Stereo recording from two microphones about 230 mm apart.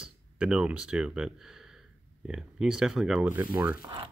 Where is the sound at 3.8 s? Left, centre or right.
Centre.